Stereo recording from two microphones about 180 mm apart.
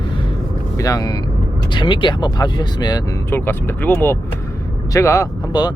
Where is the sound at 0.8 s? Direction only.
20° left (ahead or behind).